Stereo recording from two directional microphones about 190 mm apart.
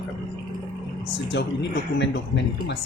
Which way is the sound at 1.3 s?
65° left (ahead or behind).